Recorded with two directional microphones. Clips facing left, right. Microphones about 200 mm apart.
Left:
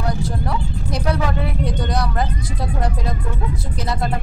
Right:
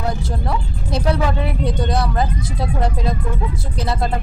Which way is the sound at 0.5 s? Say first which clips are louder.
Right 1 dB; 25° right (ahead or behind).